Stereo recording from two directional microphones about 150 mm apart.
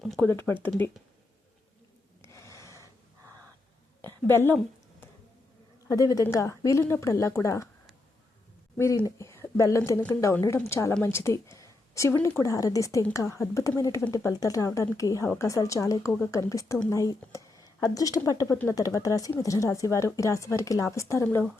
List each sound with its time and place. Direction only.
0.2 s speech: 15° left (ahead or behind)
2.2 s gasp: 20° left (ahead or behind)
4.0 s a sound: 15° left (ahead or behind)
5.9 s speech: 25° left (ahead or behind)
8.8 s a woman's voice: 20° left (ahead or behind)